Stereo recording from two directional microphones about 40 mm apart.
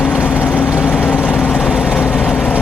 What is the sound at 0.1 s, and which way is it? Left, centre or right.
Vehicle, left.